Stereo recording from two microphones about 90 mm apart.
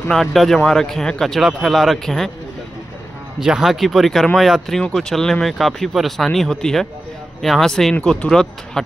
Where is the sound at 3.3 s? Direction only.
5° right (ahead or behind).